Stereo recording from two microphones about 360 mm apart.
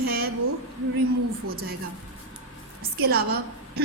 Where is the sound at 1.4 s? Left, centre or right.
Right.